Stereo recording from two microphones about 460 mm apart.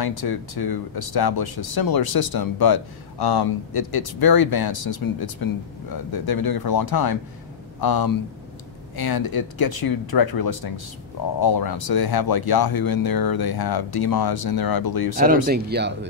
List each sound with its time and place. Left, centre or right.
0.0 s speech: left
15.4 s speech: right